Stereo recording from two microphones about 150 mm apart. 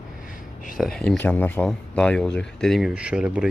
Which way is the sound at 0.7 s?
Centre (ahead or behind).